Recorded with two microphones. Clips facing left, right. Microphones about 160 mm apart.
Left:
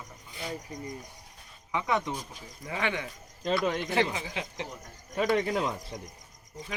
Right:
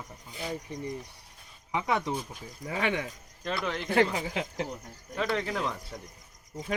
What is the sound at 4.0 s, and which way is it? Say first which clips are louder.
Speech: right 3 dB; 40° right (ahead or behind).